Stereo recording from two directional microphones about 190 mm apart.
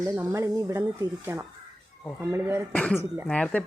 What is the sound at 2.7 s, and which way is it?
Speech, 5° left (ahead or behind).